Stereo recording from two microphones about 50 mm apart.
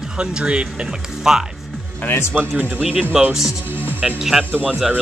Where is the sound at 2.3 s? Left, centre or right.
Right.